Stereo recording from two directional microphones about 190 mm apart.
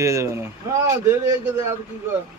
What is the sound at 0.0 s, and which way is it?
Speech, 15° right (ahead or behind).